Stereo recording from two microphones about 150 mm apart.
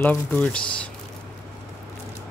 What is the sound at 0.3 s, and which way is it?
Speech, 5° left (ahead or behind).